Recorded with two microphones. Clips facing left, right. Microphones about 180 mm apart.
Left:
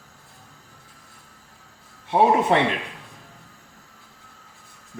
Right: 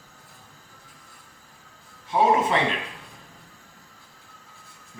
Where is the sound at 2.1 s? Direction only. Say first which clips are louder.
Left 3 dB; 60° left (ahead or behind).